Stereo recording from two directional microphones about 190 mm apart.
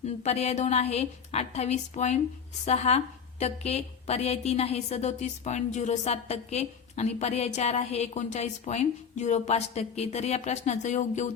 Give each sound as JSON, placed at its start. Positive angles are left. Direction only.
{"t": 0.0, "sound": "a woman's voice", "side_deg": 35}